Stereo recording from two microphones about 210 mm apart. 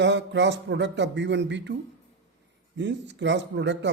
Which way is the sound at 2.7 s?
55° right (ahead or behind).